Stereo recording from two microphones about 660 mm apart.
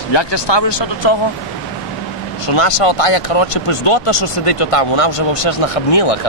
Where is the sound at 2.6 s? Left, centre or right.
Left.